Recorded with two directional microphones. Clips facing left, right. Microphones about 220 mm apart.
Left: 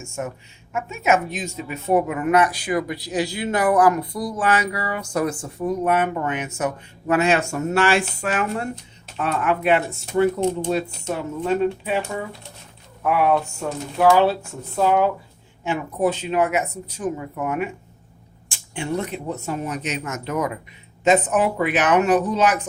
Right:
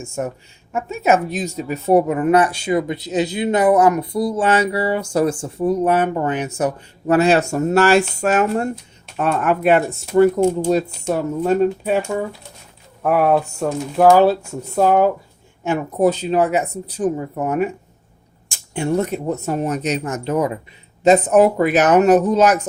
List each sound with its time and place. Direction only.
0.7 s a woman's voice: 35° right (ahead or behind)